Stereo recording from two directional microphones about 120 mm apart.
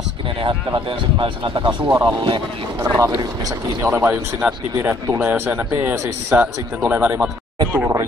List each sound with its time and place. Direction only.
0.4 s speech: 45° right (ahead or behind)
1.8 s speech: 20° right (ahead or behind)
2.0 s speech: 40° right (ahead or behind)
2.8 s speech: 25° right (ahead or behind)